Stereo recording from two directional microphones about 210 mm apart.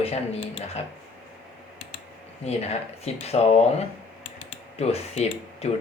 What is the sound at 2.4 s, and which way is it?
Speech, 30° left (ahead or behind).